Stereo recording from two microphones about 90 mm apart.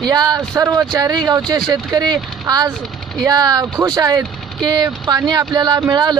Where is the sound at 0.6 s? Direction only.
30° right (ahead or behind).